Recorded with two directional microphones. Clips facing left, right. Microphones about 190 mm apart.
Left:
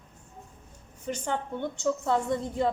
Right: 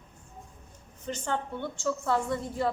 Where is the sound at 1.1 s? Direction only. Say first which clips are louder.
Left 1 dB; 15° left (ahead or behind).